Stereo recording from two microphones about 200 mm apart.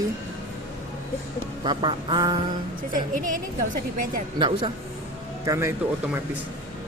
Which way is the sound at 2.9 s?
40° right (ahead or behind).